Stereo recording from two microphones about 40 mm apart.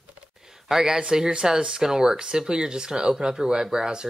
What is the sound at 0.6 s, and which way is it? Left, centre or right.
Speech, centre.